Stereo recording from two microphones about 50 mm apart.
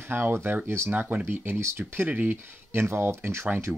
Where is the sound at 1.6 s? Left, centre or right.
Right.